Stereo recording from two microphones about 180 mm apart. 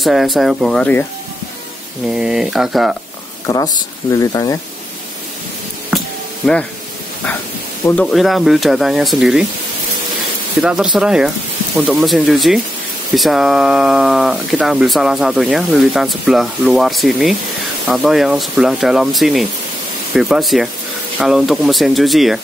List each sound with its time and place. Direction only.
0.0 s speech: centre (ahead or behind)
2.0 s speech: 5° right (ahead or behind)
3.4 s speech: 20° left (ahead or behind)
7.8 s speech: 10° left (ahead or behind)
10.6 s speech: 5° right (ahead or behind)